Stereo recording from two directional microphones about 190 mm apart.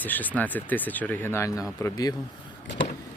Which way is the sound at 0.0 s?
10° left (ahead or behind).